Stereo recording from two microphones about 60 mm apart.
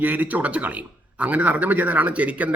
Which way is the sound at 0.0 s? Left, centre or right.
Right.